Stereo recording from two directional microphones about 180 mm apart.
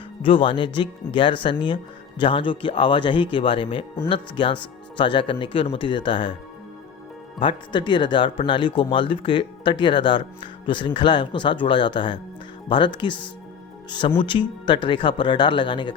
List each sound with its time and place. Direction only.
0.2 s speech: 30° left (ahead or behind)
7.3 s speech: 25° left (ahead or behind)
14.2 s speech: 25° left (ahead or behind)